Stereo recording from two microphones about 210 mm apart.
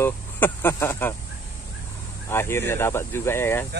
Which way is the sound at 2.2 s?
10° left (ahead or behind).